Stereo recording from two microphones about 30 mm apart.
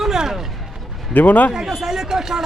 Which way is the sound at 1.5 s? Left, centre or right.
Centre.